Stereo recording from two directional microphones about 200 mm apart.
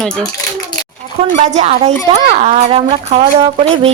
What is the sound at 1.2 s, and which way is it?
A woman's voice, 35° right (ahead or behind).